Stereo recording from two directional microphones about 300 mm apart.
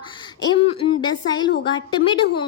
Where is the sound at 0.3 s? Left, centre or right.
Centre.